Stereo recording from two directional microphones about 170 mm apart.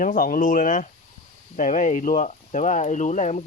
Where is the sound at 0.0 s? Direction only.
50° left (ahead or behind).